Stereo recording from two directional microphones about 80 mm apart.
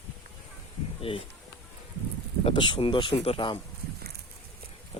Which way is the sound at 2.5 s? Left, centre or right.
Left.